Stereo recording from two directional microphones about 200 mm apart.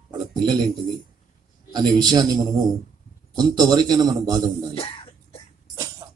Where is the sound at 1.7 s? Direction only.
20° right (ahead or behind).